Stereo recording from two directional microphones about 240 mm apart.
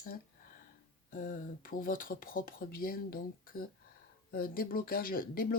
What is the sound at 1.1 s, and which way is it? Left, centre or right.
Speech, left.